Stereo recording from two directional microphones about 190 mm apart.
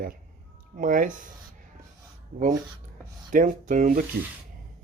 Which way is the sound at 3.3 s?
40° right (ahead or behind).